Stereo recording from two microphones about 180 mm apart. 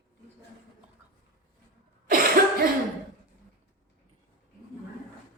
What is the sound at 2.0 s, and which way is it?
Cough, 55° right (ahead or behind).